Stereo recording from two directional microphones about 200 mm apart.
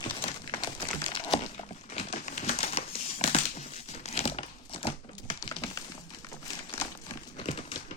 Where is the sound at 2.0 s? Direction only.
35° left (ahead or behind).